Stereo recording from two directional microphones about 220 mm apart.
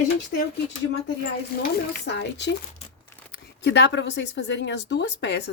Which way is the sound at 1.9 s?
50° left (ahead or behind).